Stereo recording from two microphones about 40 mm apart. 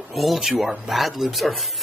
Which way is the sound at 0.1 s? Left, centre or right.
Centre.